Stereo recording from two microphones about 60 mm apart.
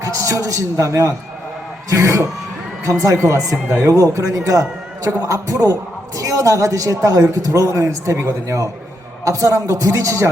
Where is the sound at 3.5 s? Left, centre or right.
Right.